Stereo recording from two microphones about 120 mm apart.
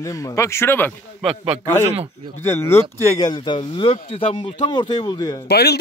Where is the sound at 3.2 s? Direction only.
40° left (ahead or behind).